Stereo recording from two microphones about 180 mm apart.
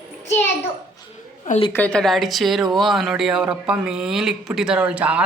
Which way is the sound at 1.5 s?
35° left (ahead or behind).